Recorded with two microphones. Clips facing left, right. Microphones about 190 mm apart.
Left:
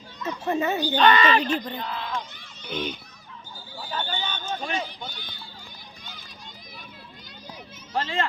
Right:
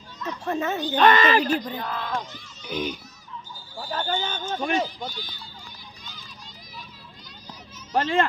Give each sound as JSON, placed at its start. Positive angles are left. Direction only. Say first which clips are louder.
{"t": 0.2, "sound": "speech", "louder": "left 2 dB", "side_deg": 10}
{"t": 1.1, "sound": "speech", "louder": "right 1 dB", "side_deg": -45}
{"t": 1.8, "sound": "a sound", "louder": "right 2 dB", "side_deg": -50}
{"t": 2.6, "sound": "speech", "louder": "right 2 dB", "side_deg": -10}
{"t": 3.8, "sound": "a sound", "louder": "right 4 dB", "side_deg": -50}
{"t": 4.9, "sound": "speech", "louder": "right 4 dB", "side_deg": 55}
{"t": 7.9, "sound": "a child's voice", "louder": "right 5 dB", "side_deg": -55}